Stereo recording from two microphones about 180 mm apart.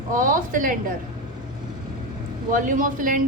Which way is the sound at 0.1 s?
50° right (ahead or behind).